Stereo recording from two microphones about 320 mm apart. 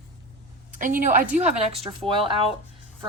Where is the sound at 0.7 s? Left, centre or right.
Right.